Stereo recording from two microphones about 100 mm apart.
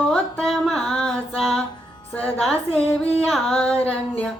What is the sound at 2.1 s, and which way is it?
Music, 15° left (ahead or behind).